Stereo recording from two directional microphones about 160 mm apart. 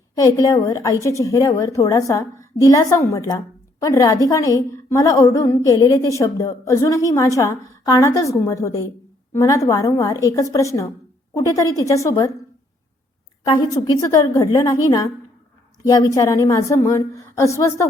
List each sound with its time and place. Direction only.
0.2 s a woman's voice: 25° left (ahead or behind)
13.7 s a woman's voice: 20° left (ahead or behind)